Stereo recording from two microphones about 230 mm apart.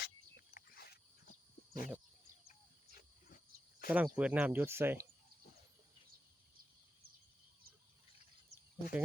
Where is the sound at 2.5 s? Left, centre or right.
Left.